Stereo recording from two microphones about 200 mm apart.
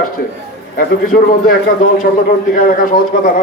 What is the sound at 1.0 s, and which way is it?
A man's voice, 45° left (ahead or behind).